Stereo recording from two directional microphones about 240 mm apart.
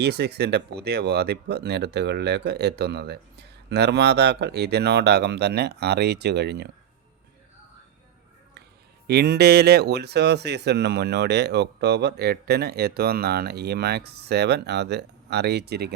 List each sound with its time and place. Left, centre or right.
0.0 s speech: right
9.0 s speech: right